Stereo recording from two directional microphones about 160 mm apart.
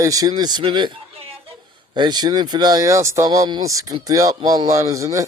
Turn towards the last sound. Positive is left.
turn(degrees=-20)  # may be behind; listen again after turning